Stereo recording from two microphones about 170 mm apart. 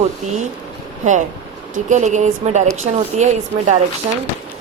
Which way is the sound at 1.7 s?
45° right (ahead or behind).